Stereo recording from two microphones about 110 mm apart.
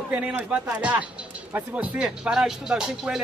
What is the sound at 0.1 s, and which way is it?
Speech, 10° right (ahead or behind).